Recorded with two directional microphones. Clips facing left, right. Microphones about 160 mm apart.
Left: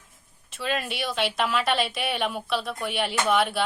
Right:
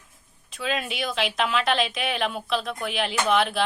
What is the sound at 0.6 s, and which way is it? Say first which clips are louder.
Speech: right 1 dB; centre (ahead or behind).